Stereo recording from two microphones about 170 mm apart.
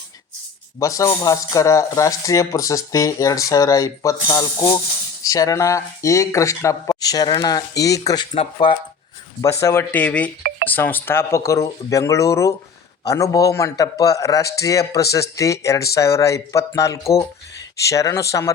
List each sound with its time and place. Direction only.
0.8 s speech: 20° left (ahead or behind)
8.3 s speech: 30° left (ahead or behind)
9.4 s speech: 15° left (ahead or behind)